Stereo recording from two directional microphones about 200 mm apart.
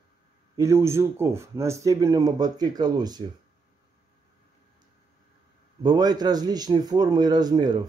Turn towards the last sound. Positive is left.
turn(degrees=-20)  # may be behind; listen again after turning